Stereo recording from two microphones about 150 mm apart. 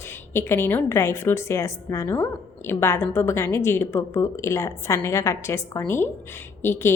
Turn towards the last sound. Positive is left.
turn(degrees=15)  # may be behind; listen again after turning